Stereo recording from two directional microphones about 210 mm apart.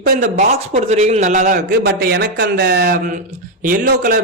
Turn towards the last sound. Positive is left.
turn(degrees=-40)  # may be behind; listen again after turning